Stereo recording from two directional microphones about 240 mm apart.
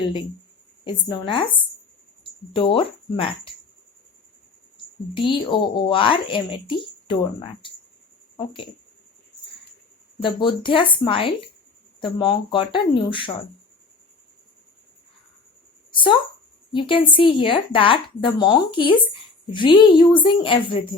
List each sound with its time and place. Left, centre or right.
0.9 s speech: centre
5.1 s speech: centre
10.2 s speech: left
15.9 s a sound: centre
16.7 s speech: left